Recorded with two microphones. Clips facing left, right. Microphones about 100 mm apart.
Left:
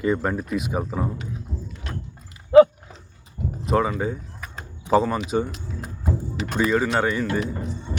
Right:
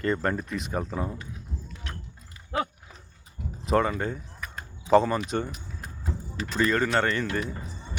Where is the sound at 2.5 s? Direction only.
90° left.